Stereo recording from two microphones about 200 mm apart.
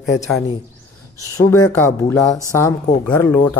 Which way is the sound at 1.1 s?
15° left (ahead or behind).